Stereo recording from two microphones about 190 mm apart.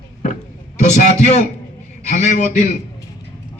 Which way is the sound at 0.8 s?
40° left (ahead or behind).